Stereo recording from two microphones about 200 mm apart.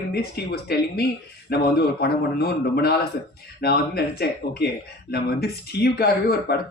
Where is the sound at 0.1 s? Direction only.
50° left (ahead or behind).